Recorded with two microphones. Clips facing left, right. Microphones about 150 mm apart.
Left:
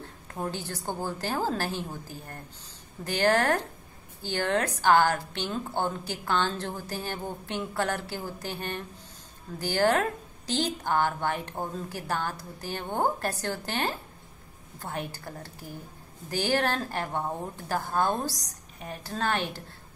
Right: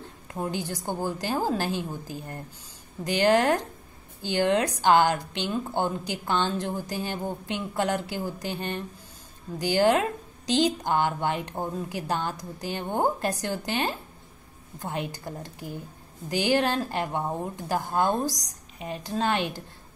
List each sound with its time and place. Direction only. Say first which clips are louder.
0.3 s a woman's voice: right 3 dB; 15° right (ahead or behind)